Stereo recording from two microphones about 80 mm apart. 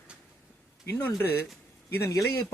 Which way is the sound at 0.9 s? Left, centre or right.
Left.